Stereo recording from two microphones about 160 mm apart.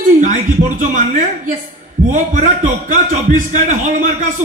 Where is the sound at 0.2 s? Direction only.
50° right (ahead or behind).